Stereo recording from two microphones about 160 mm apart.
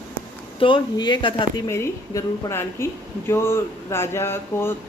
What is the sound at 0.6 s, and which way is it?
Speech, 30° left (ahead or behind).